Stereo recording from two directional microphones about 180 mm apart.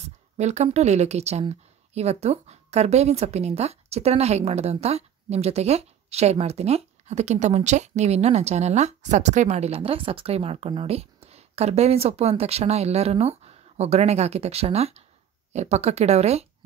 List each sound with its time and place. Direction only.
0.4 s speech: 40° right (ahead or behind)